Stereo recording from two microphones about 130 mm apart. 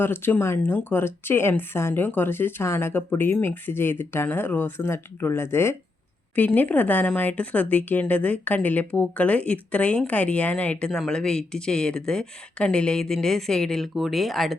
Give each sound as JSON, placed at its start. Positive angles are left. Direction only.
{"t": 0.0, "sound": "speech", "side_deg": 15}